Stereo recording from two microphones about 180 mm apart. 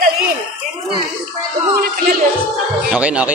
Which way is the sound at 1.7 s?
55° right (ahead or behind).